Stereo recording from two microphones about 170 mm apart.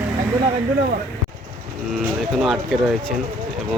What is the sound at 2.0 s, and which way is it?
Speech, 5° right (ahead or behind).